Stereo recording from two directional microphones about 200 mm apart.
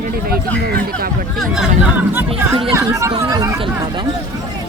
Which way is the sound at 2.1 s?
10° right (ahead or behind).